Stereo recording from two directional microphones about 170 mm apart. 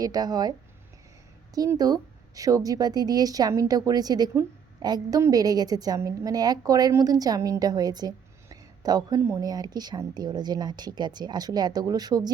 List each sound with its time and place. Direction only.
0.0 s a woman's voice: 25° right (ahead or behind)
1.5 s a woman's voice: 20° right (ahead or behind)